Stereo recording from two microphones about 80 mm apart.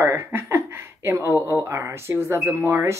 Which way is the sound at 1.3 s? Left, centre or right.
Left.